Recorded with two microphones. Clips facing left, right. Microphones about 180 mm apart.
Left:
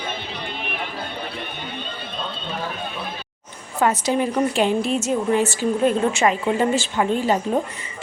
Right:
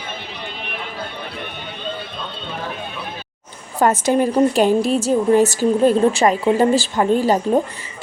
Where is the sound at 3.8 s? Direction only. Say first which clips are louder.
Right 4 dB; 45° right (ahead or behind).